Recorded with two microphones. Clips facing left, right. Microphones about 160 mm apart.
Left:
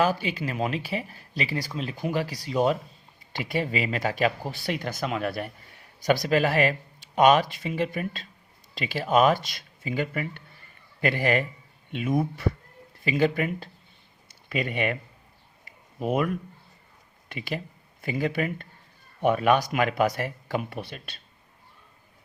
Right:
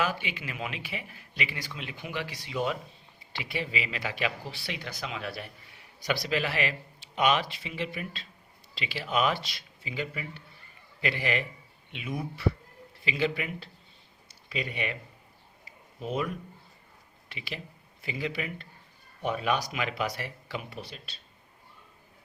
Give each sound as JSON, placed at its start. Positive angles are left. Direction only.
{"t": 0.0, "sound": "speech", "side_deg": 40}
{"t": 16.0, "sound": "speech", "side_deg": 60}
{"t": 17.2, "sound": "speech", "side_deg": 50}